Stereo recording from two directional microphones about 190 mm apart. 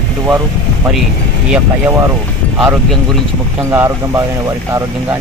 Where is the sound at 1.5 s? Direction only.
15° right (ahead or behind).